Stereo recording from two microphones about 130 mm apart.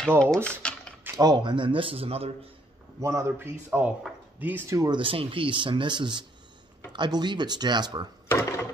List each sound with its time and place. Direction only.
0.2 s typing: 10° left (ahead or behind)
1.1 s speech: 30° right (ahead or behind); by 2.3 s 50° right (ahead or behind)
3.0 s speech: 25° right (ahead or behind)
4.7 s speech: 35° right (ahead or behind)
8.3 s a sound: 25° left (ahead or behind)